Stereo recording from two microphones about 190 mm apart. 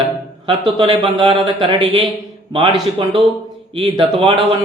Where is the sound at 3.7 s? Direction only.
25° right (ahead or behind).